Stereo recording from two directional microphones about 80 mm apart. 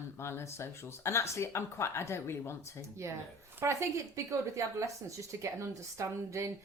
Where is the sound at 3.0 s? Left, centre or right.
Right.